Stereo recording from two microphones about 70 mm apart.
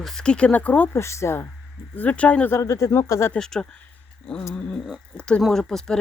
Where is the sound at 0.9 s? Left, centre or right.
Left.